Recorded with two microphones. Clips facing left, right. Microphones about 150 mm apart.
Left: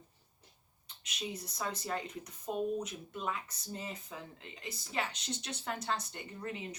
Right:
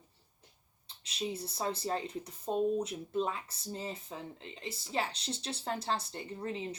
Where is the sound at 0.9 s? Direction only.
30° right (ahead or behind).